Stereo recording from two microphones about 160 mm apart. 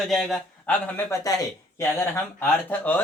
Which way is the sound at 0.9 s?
20° left (ahead or behind).